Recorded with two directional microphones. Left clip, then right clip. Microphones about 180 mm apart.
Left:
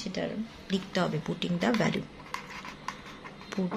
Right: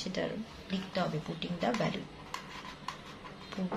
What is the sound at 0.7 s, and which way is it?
Speech, 50° left (ahead or behind).